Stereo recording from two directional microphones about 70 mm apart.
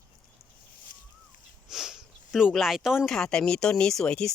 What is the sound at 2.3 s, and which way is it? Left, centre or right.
Speech, centre.